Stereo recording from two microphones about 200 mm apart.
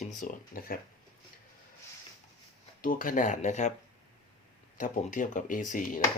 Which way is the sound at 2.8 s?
45° left (ahead or behind).